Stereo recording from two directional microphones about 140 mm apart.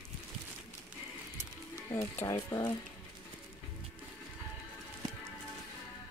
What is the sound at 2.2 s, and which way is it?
Speech, 25° left (ahead or behind).